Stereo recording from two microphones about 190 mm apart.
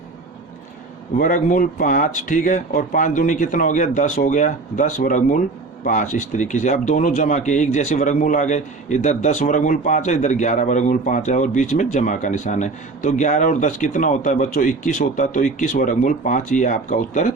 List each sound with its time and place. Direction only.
1.1 s speech: 45° left (ahead or behind)